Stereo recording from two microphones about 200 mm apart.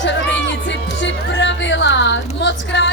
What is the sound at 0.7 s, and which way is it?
Music, 65° left (ahead or behind).